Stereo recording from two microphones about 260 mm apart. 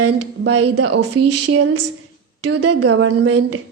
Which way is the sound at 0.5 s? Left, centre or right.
Right.